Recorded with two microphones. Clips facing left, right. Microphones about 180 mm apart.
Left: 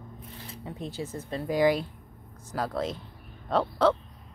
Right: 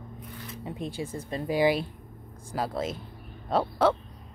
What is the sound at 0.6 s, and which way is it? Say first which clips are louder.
Speech: right 1 dB; 15° right (ahead or behind).